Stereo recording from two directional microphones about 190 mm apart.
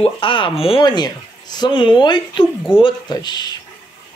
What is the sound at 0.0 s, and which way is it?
Speech, 25° left (ahead or behind).